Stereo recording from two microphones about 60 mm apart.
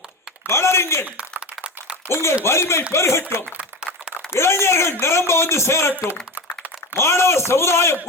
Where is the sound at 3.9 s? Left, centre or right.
Right.